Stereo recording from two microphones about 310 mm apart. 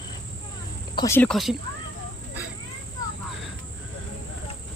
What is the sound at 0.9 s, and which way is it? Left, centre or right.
Speech, centre.